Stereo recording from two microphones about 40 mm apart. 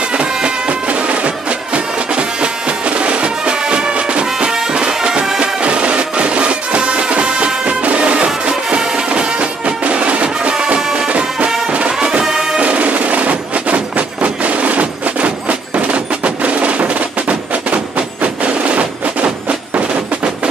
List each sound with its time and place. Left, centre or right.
0.1 s music: right
4.5 s music: centre; by 10.5 s right
10.8 s music: centre
11.1 s music: right
11.9 s music: centre
12.5 s music: right